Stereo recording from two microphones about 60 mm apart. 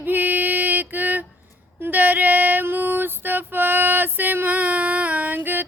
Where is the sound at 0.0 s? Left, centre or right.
Right.